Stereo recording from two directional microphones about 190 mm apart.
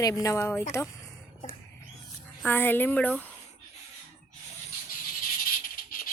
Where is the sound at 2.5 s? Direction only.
10° left (ahead or behind).